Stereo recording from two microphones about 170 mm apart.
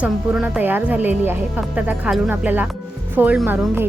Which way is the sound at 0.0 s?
5° right (ahead or behind).